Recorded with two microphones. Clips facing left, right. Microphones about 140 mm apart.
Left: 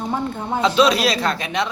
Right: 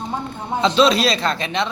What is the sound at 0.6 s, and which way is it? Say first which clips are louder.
A man's voice: right 1 dB; 10° left (ahead or behind).